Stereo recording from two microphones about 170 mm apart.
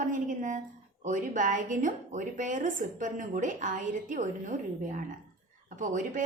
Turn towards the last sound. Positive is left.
turn(degrees=-50)  # may be behind; listen again after turning